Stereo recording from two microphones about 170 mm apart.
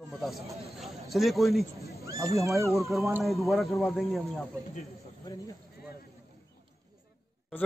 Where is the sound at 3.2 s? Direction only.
Centre (ahead or behind).